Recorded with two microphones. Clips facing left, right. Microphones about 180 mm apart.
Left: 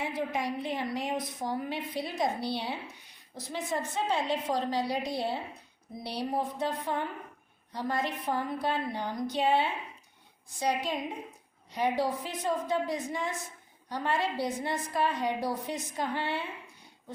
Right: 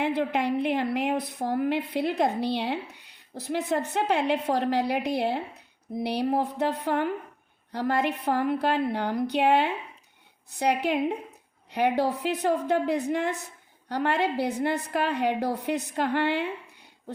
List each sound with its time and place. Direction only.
0.0 s a woman's voice: 65° right (ahead or behind)